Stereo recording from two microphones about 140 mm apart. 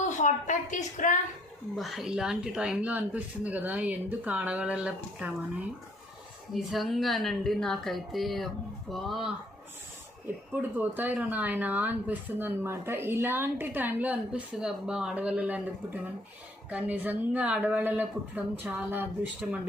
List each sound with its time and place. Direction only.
0.0 s a woman's voice: 60° left (ahead or behind)
1.7 s a woman's voice: centre (ahead or behind)
10.5 s speech: 15° right (ahead or behind)